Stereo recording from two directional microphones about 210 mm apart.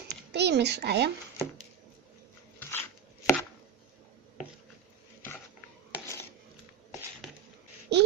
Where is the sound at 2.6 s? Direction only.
10° left (ahead or behind).